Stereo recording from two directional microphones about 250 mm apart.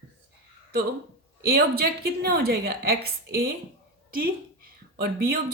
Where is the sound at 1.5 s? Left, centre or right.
Right.